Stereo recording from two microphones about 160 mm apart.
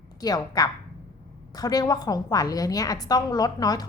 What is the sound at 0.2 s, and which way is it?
A woman's voice, 25° left (ahead or behind).